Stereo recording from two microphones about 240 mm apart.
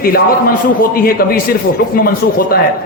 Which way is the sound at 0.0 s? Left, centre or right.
Left.